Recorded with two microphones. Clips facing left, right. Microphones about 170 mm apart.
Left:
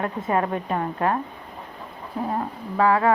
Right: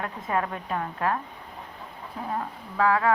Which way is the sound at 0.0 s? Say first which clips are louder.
Left 5 dB; 40° left (ahead or behind).